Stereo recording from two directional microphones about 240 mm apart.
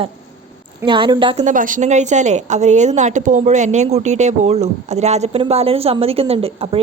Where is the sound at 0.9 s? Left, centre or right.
Centre.